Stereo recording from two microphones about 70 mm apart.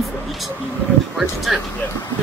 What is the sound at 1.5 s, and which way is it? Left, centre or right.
Speech, centre.